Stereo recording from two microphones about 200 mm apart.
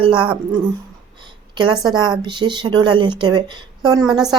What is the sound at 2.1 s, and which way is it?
A woman's voice, 25° right (ahead or behind).